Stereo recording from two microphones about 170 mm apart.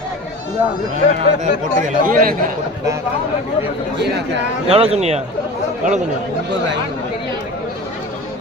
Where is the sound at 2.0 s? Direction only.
55° right (ahead or behind).